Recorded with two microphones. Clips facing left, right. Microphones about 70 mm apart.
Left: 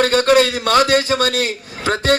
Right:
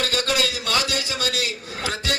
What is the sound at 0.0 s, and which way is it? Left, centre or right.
A man's voice, left.